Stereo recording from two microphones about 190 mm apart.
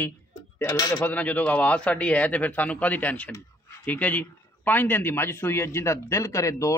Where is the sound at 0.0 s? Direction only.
15° left (ahead or behind).